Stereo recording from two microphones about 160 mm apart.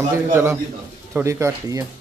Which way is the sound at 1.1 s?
15° right (ahead or behind).